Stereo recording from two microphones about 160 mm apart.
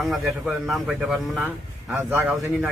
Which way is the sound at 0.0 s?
Centre (ahead or behind).